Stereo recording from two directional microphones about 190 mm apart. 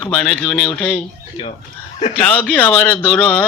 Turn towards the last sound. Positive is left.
turn(degrees=5)  # may be behind; listen again after turning